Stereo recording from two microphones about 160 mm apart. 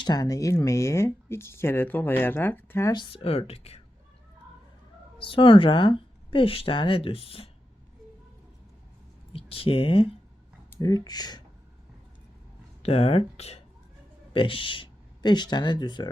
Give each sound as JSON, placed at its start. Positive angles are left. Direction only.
{"t": 0.0, "sound": "speech", "side_deg": 25}
{"t": 2.9, "sound": "speech", "side_deg": 30}
{"t": 5.2, "sound": "speech", "side_deg": 30}
{"t": 9.3, "sound": "speech", "side_deg": 35}
{"t": 10.8, "sound": "speech", "side_deg": 25}
{"t": 12.8, "sound": "speech", "side_deg": 40}